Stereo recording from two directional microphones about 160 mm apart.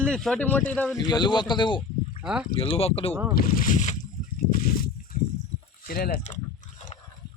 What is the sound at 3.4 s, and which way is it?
Speech, 60° left (ahead or behind).